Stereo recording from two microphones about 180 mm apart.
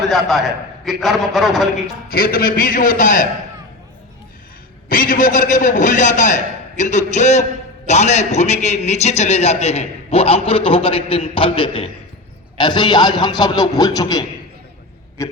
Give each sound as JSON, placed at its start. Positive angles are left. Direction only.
{"t": 0.1, "sound": "a man's voice", "side_deg": 0}
{"t": 2.0, "sound": "a man's voice", "side_deg": 55}
{"t": 4.9, "sound": "a man's voice", "side_deg": 50}
{"t": 15.2, "sound": "a sound", "side_deg": 15}